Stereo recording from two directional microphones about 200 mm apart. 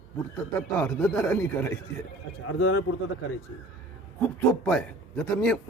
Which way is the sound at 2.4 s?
90° left.